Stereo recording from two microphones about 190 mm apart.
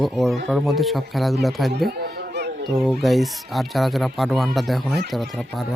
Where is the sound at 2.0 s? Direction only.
60° right (ahead or behind).